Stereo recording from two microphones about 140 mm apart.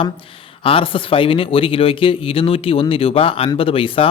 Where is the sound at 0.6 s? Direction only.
40° left (ahead or behind).